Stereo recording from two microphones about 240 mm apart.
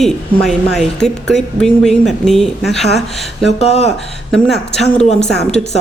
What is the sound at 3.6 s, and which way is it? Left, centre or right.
Speech, left.